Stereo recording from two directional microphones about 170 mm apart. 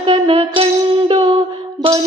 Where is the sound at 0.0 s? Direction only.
35° right (ahead or behind).